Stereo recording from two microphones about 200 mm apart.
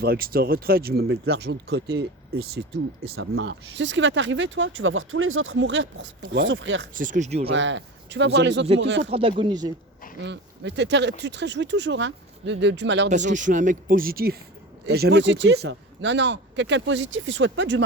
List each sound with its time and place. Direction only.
0.0 s speech: 50° right (ahead or behind)
1.1 s speech: 90° right
1.4 s speech: 55° right (ahead or behind)
3.2 s speech: 80° right
6.9 s speech: 40° right (ahead or behind)
7.5 s speech: 65° right (ahead or behind)
9.0 s speech: 30° right (ahead or behind)
10.2 s speech: 60° right (ahead or behind)
13.1 s speech: 40° right (ahead or behind); by 17.8 s 65° right (ahead or behind)